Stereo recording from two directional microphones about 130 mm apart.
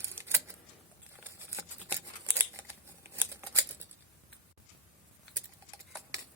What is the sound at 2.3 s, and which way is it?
Scissors, 20° right (ahead or behind).